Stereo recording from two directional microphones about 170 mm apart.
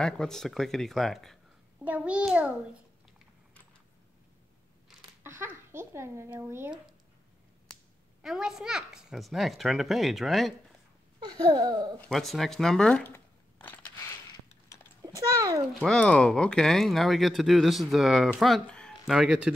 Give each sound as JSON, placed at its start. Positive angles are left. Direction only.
{"t": 0.0, "sound": "a child's voice", "side_deg": 5}
{"t": 5.2, "sound": "speech", "side_deg": -15}
{"t": 8.2, "sound": "speech", "side_deg": -5}
{"t": 11.1, "sound": "speech", "side_deg": -25}
{"t": 12.1, "sound": "speech", "side_deg": 0}
{"t": 15.0, "sound": "a child's voice", "side_deg": -20}
{"t": 15.8, "sound": "speech", "side_deg": 5}